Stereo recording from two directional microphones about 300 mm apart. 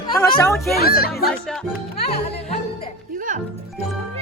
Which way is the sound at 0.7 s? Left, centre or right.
Left.